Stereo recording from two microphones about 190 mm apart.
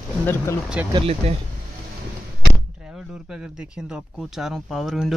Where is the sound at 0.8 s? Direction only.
10° right (ahead or behind).